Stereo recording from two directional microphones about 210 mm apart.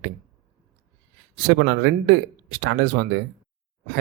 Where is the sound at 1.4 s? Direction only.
55° right (ahead or behind).